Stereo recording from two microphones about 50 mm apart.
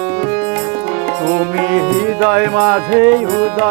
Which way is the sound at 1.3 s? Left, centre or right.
Right.